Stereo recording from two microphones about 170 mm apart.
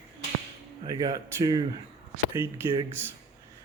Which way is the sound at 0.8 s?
20° right (ahead or behind).